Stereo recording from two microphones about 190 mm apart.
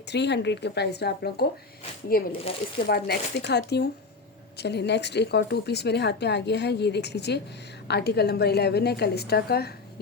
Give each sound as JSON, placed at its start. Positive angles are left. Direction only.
{"t": 0.1, "sound": "a woman's voice", "side_deg": 65}